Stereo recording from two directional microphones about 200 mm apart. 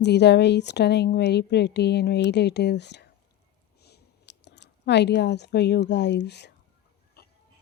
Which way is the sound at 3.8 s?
55° left (ahead or behind).